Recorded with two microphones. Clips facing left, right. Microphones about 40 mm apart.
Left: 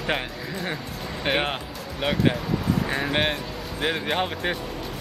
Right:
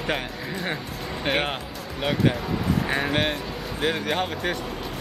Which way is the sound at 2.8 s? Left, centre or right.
Centre.